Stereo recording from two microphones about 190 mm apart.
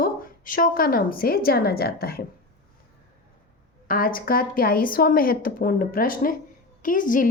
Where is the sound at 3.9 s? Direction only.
50° left (ahead or behind).